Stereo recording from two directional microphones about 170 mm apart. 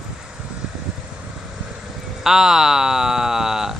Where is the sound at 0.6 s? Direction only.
5° right (ahead or behind).